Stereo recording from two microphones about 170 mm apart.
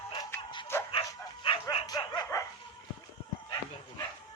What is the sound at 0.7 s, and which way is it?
Bow-wow, 15° left (ahead or behind).